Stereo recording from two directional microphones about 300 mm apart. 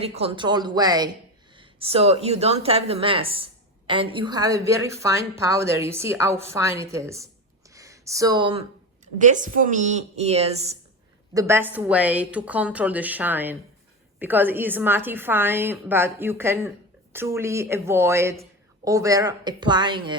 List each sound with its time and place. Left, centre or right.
0.0 s speech: centre
7.7 s a sound: centre
9.1 s a woman's voice: right
11.3 s a woman's voice: centre